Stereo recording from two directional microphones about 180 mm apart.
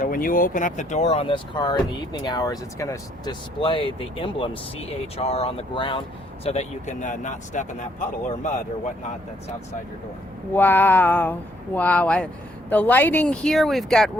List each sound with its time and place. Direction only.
0.0 s speech: 50° left (ahead or behind); by 3.3 s 15° left (ahead or behind)
3.6 s speech: 30° left (ahead or behind)
10.5 s speech: 10° left (ahead or behind)